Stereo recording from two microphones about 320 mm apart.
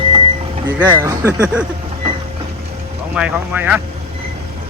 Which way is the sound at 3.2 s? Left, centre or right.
Centre.